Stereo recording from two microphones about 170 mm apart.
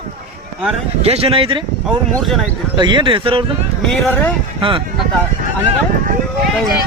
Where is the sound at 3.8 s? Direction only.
5° left (ahead or behind).